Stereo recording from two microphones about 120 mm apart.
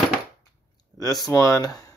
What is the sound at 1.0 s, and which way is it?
Speech, 30° left (ahead or behind).